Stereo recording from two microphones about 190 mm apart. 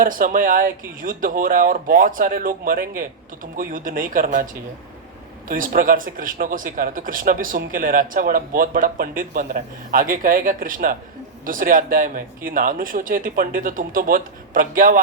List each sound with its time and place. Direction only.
0.0 s speech: 45° right (ahead or behind)
5.5 s speech: 45° right (ahead or behind)